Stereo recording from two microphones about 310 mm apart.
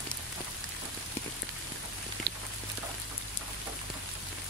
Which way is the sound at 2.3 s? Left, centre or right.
Right.